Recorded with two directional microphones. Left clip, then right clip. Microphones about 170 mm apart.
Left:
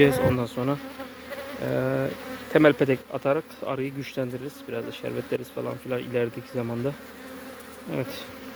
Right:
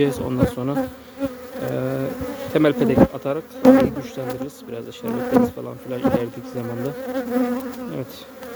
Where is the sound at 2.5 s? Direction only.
30° right (ahead or behind).